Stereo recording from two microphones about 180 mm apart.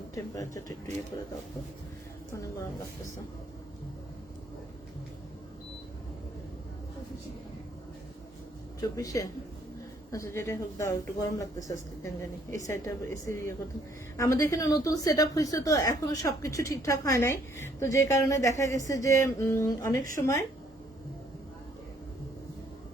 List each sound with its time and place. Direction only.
0.1 s speech: 20° left (ahead or behind)
9.0 s a woman's voice: 20° left (ahead or behind)